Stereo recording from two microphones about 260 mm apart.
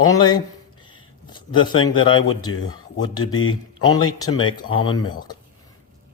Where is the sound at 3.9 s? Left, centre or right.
Centre.